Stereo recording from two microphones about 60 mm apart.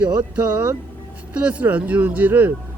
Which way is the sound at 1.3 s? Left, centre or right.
Right.